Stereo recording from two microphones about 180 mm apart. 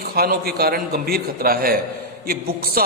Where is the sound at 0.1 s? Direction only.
55° right (ahead or behind).